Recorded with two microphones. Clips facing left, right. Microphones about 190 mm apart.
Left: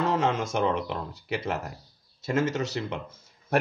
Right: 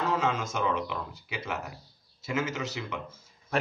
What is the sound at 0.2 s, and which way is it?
Speech, 60° left (ahead or behind).